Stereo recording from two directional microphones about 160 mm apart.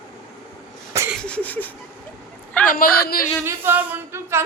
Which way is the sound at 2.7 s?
65° left (ahead or behind).